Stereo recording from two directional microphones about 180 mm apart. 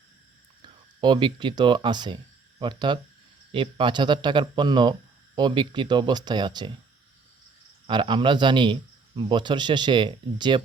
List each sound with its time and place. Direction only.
1.0 s speech: 25° right (ahead or behind)
7.9 s speech: 25° right (ahead or behind)